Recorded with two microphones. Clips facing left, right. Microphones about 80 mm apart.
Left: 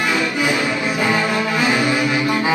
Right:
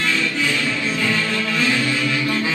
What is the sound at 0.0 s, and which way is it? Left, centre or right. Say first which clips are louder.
Music: left 3 dB; centre.